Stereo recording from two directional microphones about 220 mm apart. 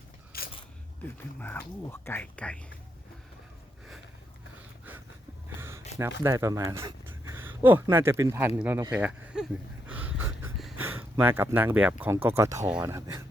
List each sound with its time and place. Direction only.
0.3 s single-lens reflex camera: 45° left (ahead or behind)
1.0 s speech: 10° left (ahead or behind)
5.5 s a sound: 10° right (ahead or behind)
6.2 s speech: 15° right (ahead or behind)